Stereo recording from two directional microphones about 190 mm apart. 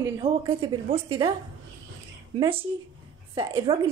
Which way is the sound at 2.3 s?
30° right (ahead or behind).